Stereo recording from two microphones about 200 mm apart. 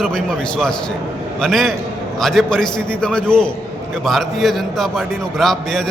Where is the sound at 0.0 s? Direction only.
5° left (ahead or behind).